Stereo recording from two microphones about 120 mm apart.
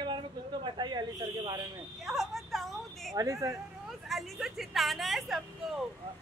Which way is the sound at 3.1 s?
25° right (ahead or behind).